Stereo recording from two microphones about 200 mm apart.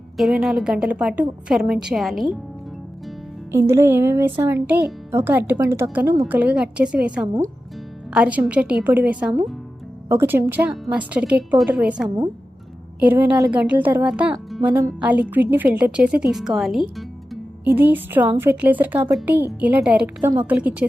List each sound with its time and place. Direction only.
0.2 s a woman's voice: centre (ahead or behind)
3.5 s speech: 15° right (ahead or behind)
12.0 s speech: 20° right (ahead or behind)
13.0 s a woman's voice: 10° right (ahead or behind)